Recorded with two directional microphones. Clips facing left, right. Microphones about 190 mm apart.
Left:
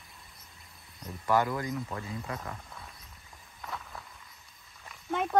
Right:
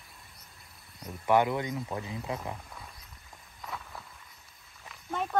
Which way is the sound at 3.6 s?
Centre (ahead or behind).